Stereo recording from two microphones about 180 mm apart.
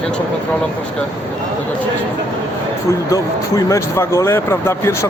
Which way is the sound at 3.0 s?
20° left (ahead or behind).